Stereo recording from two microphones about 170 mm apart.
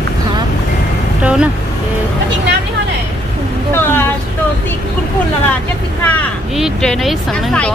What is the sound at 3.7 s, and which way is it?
Speech, 15° left (ahead or behind).